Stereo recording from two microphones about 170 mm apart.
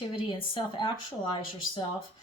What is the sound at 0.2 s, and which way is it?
Speech, 30° left (ahead or behind).